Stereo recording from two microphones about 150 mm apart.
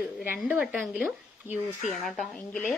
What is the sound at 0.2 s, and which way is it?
Speech, 10° right (ahead or behind).